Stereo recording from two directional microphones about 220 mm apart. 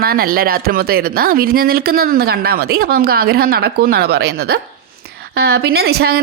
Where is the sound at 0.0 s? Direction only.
40° right (ahead or behind).